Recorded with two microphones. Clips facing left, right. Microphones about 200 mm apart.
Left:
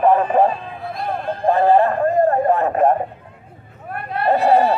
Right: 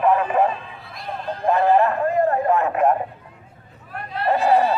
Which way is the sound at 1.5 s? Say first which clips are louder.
Left 3 dB; 30° left (ahead or behind).